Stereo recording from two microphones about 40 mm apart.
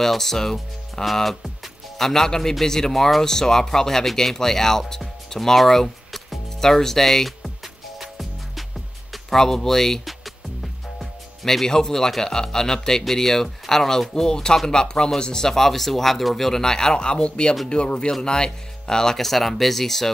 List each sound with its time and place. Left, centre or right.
0.0 s speech: centre
9.1 s speech: centre
10.0 s music: centre
12.2 s speech: centre
19.1 s speech: centre